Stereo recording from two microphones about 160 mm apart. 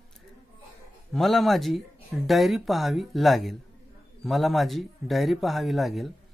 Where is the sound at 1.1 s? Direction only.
Centre (ahead or behind).